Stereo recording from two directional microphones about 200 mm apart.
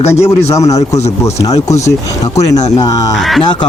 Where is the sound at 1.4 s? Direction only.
15° left (ahead or behind).